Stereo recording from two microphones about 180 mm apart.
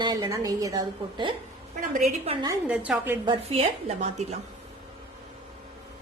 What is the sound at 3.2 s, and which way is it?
A woman's voice, 35° right (ahead or behind).